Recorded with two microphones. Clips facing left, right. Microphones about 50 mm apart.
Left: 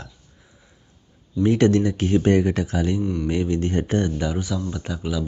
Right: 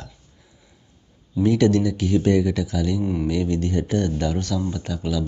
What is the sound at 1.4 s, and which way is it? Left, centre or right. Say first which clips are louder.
Speech: even; left.